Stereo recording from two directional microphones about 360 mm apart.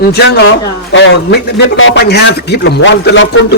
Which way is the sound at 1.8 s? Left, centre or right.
Left.